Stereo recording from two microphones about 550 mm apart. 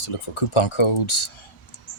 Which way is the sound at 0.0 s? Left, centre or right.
Left.